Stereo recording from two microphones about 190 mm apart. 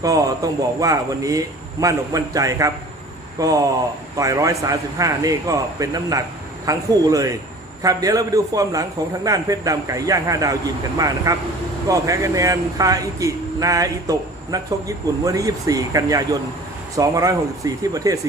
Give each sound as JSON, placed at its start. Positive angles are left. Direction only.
{"t": 0.0, "sound": "speech", "side_deg": -20}